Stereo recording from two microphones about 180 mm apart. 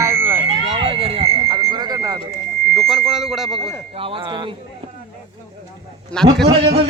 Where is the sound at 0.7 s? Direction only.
30° right (ahead or behind).